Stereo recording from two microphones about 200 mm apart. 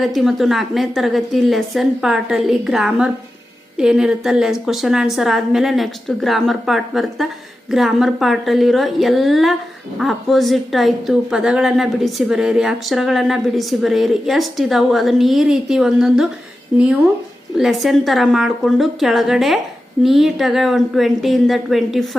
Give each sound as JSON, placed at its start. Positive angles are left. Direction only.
{"t": 0.0, "sound": "a woman's voice", "side_deg": 0}